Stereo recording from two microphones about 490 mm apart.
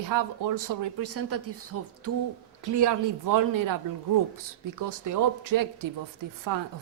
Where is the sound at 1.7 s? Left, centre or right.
Right.